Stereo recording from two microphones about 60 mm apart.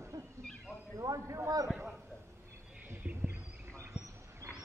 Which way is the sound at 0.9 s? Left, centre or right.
Right.